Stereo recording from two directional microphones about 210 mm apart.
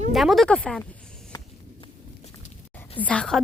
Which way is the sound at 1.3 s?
20° left (ahead or behind).